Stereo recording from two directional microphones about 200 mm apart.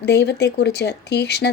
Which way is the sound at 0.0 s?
55° left (ahead or behind).